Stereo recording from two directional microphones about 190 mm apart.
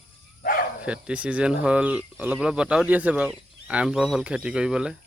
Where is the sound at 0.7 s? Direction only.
5° right (ahead or behind).